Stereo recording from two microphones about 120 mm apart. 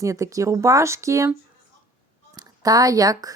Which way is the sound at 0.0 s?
25° right (ahead or behind).